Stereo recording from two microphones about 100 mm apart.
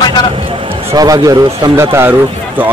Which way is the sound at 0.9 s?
40° right (ahead or behind).